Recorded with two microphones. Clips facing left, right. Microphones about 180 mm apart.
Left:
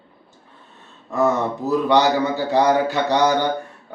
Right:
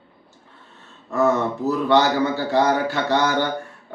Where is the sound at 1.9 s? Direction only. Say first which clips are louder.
Even; 15° left (ahead or behind).